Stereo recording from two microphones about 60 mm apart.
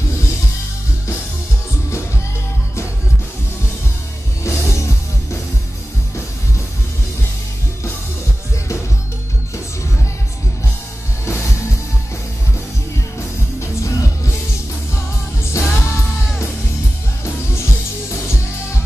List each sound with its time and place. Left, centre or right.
4.4 s music: left
11.2 s music: left
13.6 s music: left
15.5 s music: left